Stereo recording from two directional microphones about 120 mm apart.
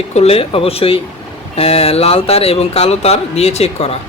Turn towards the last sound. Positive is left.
turn(degrees=60)  # may be behind; listen again after turning